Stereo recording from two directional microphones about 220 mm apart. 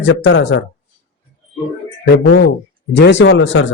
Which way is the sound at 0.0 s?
55° left (ahead or behind).